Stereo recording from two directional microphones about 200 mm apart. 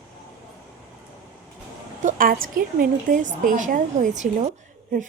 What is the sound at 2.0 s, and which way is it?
Speech, 40° right (ahead or behind).